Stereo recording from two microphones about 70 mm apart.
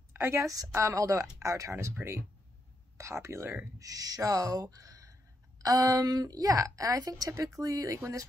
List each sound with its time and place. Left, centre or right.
0.1 s a woman's voice: right
3.8 s a woman's voice: right